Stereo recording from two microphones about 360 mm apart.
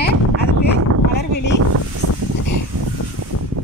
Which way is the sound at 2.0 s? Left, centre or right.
Right.